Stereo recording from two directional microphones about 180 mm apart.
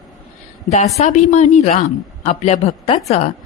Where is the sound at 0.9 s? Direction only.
40° left (ahead or behind).